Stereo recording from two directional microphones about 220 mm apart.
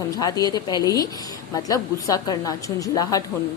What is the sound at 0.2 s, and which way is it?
A woman's voice, 15° left (ahead or behind).